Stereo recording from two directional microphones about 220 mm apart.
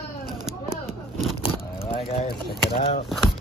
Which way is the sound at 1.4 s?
25° left (ahead or behind).